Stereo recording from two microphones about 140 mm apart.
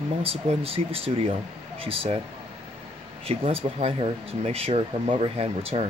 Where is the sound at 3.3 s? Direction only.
45° right (ahead or behind).